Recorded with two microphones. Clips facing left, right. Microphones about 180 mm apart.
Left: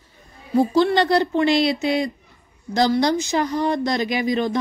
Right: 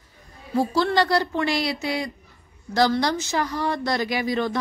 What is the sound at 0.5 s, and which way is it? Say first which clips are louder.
Speech: left 4 dB; 20° left (ahead or behind).